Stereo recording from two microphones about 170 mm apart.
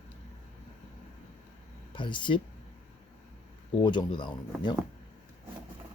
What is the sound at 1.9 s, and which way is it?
Speech, 30° left (ahead or behind).